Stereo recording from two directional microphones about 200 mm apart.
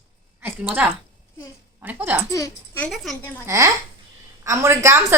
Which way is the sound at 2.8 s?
Centre (ahead or behind).